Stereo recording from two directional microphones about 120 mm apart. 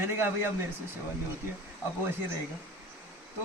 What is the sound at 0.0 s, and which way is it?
Speech, 20° right (ahead or behind).